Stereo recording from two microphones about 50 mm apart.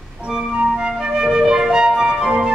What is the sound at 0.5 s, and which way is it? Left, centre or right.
Flute, centre.